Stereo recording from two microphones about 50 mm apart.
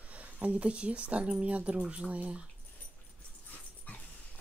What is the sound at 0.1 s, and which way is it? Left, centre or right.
Speech, right.